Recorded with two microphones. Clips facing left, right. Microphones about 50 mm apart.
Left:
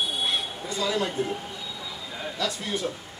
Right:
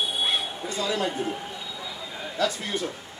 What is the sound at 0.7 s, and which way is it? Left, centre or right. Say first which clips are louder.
Speech: even; right.